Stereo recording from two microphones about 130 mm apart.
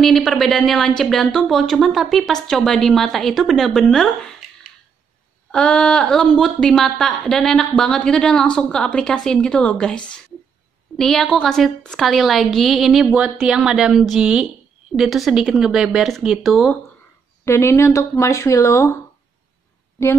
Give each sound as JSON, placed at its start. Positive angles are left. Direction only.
{"t": 0.0, "sound": "a woman's voice", "side_deg": 5}
{"t": 5.5, "sound": "a woman's voice", "side_deg": 5}
{"t": 17.5, "sound": "speech", "side_deg": 20}